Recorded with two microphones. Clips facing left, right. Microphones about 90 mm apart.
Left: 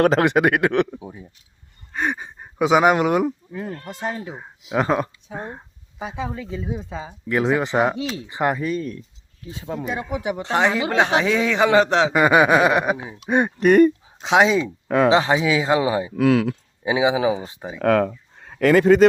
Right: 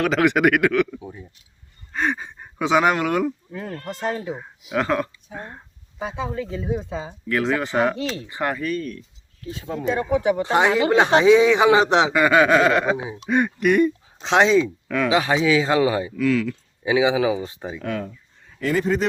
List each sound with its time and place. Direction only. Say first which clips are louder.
0.0 s speech: left 3 dB; 40° left (ahead or behind)
0.3 s speech: even; 25° left (ahead or behind)
0.9 s speech: even; 15° left (ahead or behind)
10.4 s a man's voice: right 2 dB; 10° right (ahead or behind)
12.1 s speech: left 2 dB; 20° left (ahead or behind)
13.6 s speech: left 6 dB; 40° left (ahead or behind)
14.2 s speech: even; 10° left (ahead or behind)
14.8 s speech: left 4 dB; 35° left (ahead or behind); by 16.1 s 20° left (ahead or behind)
16.1 s speech: left 3 dB; 65° left (ahead or behind)
16.8 s speech: even; 20° left (ahead or behind)
17.7 s speech: left 11 dB; 65° left (ahead or behind)
18.3 s a sound: left 7 dB; 70° left (ahead or behind); by 19.0 s 90° left